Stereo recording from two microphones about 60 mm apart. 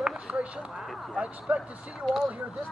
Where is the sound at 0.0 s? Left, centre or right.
Centre.